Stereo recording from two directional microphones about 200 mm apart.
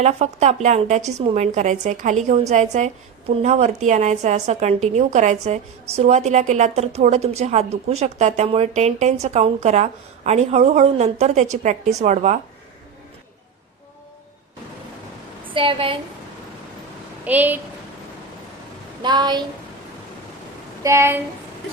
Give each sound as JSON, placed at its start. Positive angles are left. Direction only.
{"t": 0.0, "sound": "a woman's voice", "side_deg": -35}
{"t": 15.5, "sound": "a woman's voice", "side_deg": -25}
{"t": 17.2, "sound": "a woman's voice", "side_deg": -10}
{"t": 19.0, "sound": "a woman's voice", "side_deg": -20}
{"t": 20.8, "sound": "a woman's voice", "side_deg": -15}